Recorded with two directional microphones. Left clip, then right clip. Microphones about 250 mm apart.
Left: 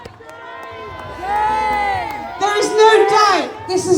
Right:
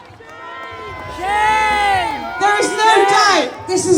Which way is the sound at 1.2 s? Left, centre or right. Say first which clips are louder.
Right 3 dB; right.